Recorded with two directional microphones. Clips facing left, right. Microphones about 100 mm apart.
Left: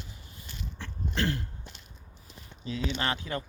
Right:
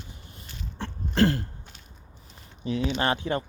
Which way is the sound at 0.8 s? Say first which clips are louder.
Right 9 dB; 35° right (ahead or behind).